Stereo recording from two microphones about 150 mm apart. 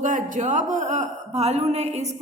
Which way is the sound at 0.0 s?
60° right (ahead or behind).